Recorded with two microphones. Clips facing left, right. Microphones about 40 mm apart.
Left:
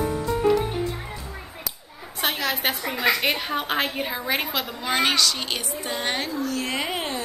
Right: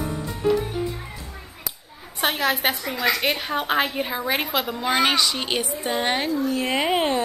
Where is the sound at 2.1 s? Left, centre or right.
Centre.